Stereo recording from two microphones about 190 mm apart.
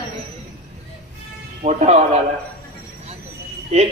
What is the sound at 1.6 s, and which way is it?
Speech, 35° right (ahead or behind).